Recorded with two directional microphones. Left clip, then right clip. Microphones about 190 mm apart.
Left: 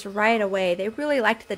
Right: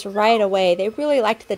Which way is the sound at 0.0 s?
15° right (ahead or behind).